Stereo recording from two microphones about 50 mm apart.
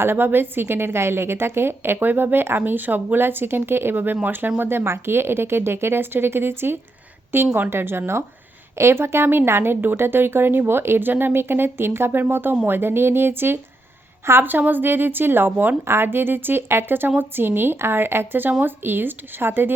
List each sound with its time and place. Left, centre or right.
0.0 s a woman's voice: right
3.9 s a woman's voice: right
14.3 s a woman's voice: right
14.7 s a woman's voice: right